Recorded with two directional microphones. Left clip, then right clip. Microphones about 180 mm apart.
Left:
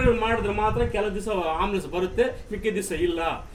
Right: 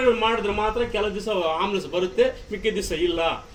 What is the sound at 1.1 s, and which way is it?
Speech, 50° left (ahead or behind).